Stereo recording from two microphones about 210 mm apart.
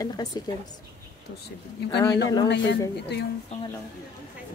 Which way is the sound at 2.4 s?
55° left (ahead or behind).